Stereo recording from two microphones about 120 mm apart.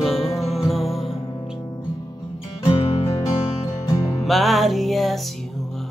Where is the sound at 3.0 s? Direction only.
30° left (ahead or behind).